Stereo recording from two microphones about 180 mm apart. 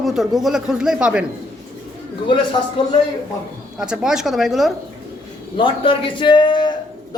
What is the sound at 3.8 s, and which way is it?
Speech, 5° right (ahead or behind).